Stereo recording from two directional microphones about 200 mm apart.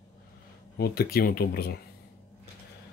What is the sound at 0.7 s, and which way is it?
Speech, 50° left (ahead or behind).